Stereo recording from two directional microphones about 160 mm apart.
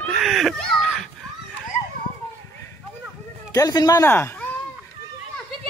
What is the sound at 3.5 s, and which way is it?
Speech, 20° left (ahead or behind).